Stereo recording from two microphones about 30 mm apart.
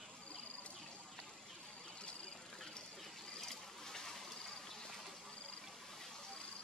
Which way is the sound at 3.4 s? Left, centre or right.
Centre.